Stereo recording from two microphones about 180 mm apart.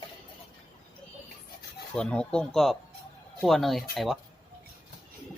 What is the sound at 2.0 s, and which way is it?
Speech, 5° left (ahead or behind).